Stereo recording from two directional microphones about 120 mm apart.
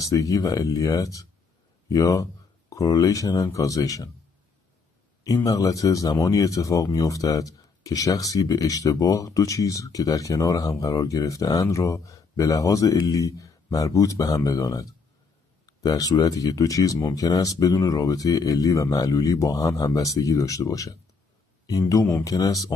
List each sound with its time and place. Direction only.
0.0 s speech: 30° left (ahead or behind)
5.2 s speech: 30° left (ahead or behind)
15.6 s a sound: 30° left (ahead or behind)
16.3 s speech: 30° left (ahead or behind)